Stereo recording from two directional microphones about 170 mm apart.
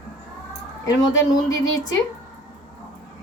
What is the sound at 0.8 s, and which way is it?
A woman's voice, 20° left (ahead or behind).